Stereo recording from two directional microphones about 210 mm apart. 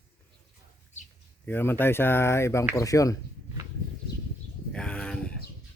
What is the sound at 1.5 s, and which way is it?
Speech, 10° left (ahead or behind).